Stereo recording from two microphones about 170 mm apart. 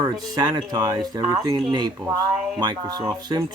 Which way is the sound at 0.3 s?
25° right (ahead or behind).